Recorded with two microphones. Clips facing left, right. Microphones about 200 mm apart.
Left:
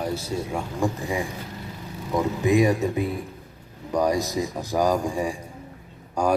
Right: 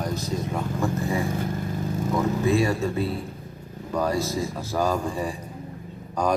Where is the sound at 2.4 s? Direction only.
15° left (ahead or behind).